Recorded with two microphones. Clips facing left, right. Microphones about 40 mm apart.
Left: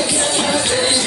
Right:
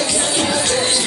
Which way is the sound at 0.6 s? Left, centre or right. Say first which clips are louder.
Left 1 dB; centre.